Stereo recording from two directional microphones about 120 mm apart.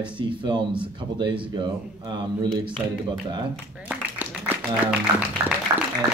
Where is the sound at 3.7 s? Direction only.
10° right (ahead or behind).